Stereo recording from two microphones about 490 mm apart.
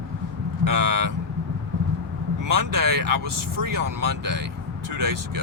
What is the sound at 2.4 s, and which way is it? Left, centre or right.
Speech, right.